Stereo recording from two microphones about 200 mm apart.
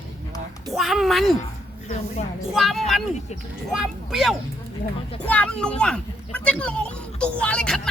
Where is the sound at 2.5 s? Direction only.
Centre (ahead or behind).